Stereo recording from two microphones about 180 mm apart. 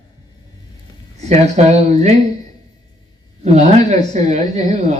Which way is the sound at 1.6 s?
40° right (ahead or behind).